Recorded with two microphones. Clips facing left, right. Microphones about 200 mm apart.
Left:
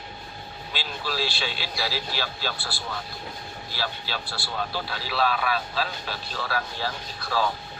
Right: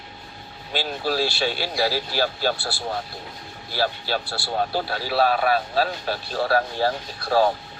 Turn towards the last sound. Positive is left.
turn(degrees=-50)  # may be behind; listen again after turning